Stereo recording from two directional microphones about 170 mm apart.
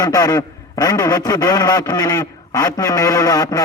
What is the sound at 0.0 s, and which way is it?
A man's voice, 20° left (ahead or behind).